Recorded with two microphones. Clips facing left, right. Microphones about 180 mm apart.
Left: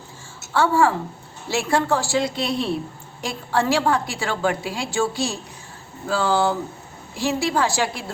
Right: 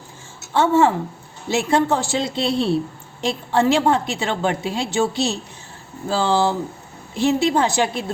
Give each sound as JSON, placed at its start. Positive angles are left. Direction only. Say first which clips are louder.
{"t": 0.5, "sound": "a woman's voice", "louder": "right 2 dB", "side_deg": -20}